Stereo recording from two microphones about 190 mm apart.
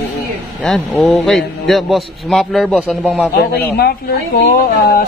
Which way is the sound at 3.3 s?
55° left (ahead or behind).